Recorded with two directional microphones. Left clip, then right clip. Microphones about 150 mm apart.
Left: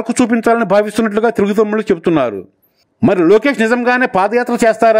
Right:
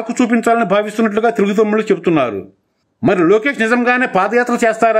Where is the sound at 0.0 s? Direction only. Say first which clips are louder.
Left 1 dB; 35° left (ahead or behind).